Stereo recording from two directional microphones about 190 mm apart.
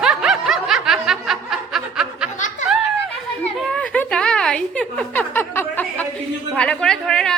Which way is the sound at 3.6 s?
5° left (ahead or behind).